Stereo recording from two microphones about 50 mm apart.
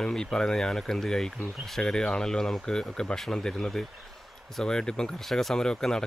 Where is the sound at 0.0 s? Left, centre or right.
Centre.